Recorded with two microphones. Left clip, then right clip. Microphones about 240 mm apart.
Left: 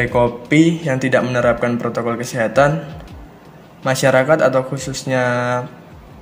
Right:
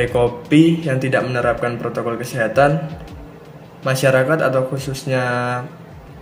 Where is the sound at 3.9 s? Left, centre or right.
Left.